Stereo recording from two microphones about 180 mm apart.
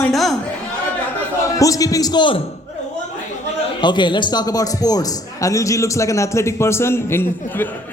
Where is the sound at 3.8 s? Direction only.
25° left (ahead or behind).